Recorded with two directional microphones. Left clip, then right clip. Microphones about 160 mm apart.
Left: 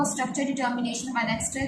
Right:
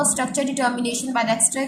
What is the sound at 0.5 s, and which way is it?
Speech, 70° right (ahead or behind).